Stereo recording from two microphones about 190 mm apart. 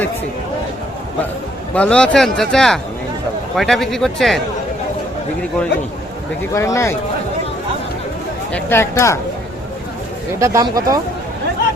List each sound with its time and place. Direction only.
1.7 s speech: 5° left (ahead or behind)
6.5 s speech: 15° left (ahead or behind)
8.5 s speech: 10° left (ahead or behind)
10.4 s speech: 15° right (ahead or behind)